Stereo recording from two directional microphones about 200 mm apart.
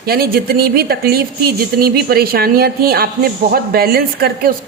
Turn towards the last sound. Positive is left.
turn(degrees=-50)  # may be behind; listen again after turning